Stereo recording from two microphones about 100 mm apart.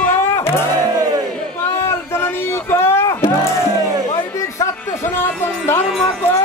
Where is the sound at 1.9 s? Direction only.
25° left (ahead or behind).